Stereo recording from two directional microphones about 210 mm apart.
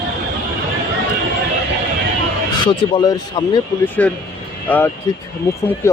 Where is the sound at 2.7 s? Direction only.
20° left (ahead or behind).